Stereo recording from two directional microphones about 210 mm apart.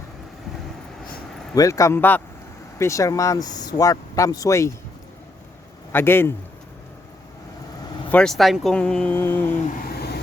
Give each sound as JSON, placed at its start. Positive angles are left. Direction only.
{"t": 1.5, "sound": "speech", "side_deg": 15}
{"t": 5.9, "sound": "speech", "side_deg": 10}
{"t": 8.1, "sound": "speech", "side_deg": 5}